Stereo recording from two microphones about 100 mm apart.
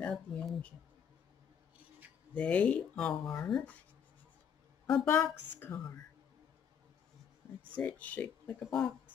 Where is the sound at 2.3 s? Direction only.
15° left (ahead or behind).